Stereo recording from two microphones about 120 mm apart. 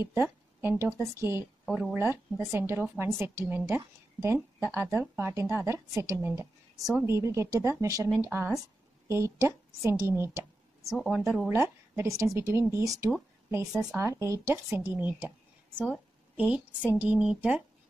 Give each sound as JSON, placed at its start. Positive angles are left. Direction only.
{"t": 0.0, "sound": "speech", "side_deg": -20}
{"t": 10.9, "sound": "a woman's voice", "side_deg": 0}
{"t": 11.4, "sound": "speech", "side_deg": -20}
{"t": 16.3, "sound": "a woman's voice", "side_deg": -10}